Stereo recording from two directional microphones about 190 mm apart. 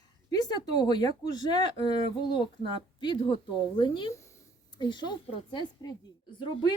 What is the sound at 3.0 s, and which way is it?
Speech, 25° left (ahead or behind).